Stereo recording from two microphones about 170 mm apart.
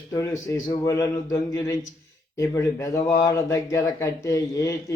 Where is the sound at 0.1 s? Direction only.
20° left (ahead or behind).